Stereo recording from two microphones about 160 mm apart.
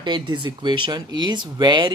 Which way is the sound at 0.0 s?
30° right (ahead or behind).